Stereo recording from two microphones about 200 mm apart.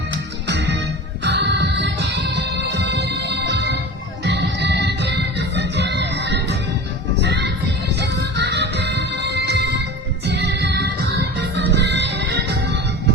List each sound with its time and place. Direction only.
0.4 s music: 60° right (ahead or behind)